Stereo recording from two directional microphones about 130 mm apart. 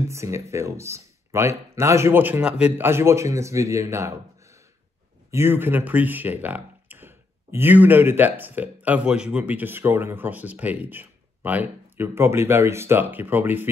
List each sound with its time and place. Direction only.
0.1 s speech: 20° right (ahead or behind)
2.9 s speech: 20° right (ahead or behind)